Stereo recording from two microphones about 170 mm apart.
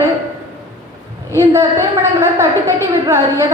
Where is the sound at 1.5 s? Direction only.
15° right (ahead or behind).